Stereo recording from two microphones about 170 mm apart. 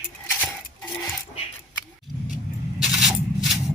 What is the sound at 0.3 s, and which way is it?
Cutlery, 10° left (ahead or behind).